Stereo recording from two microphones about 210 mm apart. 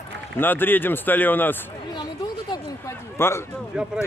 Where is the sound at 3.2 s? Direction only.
10° left (ahead or behind).